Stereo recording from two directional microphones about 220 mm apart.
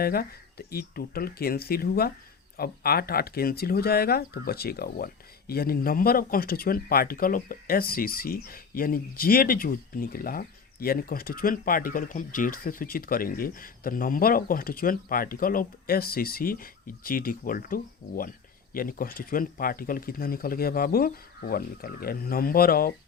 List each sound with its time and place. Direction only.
0.0 s speech: 45° left (ahead or behind)